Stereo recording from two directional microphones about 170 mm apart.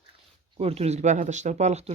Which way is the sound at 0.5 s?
35° right (ahead or behind).